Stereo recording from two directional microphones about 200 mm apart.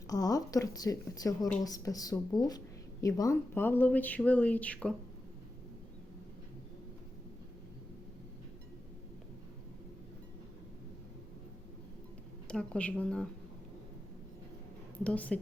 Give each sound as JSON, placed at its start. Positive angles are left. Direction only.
{"t": 0.1, "sound": "speech", "side_deg": 15}
{"t": 12.5, "sound": "speech", "side_deg": 5}
{"t": 15.0, "sound": "speech", "side_deg": 5}